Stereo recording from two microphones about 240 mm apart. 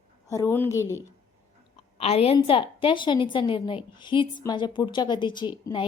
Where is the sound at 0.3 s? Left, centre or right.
Centre.